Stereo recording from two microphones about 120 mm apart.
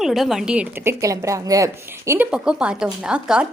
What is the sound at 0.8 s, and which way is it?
A woman's voice, 25° right (ahead or behind).